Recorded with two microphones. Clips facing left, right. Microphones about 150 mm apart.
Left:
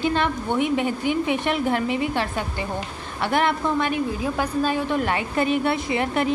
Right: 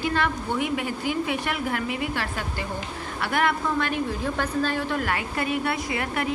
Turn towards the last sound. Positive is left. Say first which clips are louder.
# left 5 dB
turn(degrees=25)  # may be behind; listen again after turning